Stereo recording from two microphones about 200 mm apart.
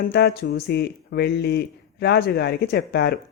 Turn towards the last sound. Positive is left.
turn(degrees=55)  # may be behind; listen again after turning